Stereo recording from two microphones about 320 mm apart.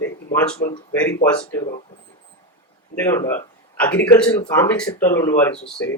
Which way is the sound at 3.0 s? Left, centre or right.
Centre.